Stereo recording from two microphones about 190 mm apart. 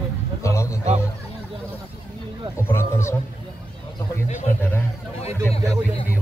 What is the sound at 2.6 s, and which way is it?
Speech, 15° left (ahead or behind).